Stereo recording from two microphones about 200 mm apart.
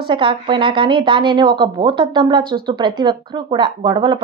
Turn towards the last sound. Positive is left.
turn(degrees=-20)  # may be behind; listen again after turning